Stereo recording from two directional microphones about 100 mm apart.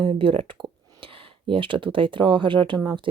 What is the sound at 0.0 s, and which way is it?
Speech, 60° right (ahead or behind).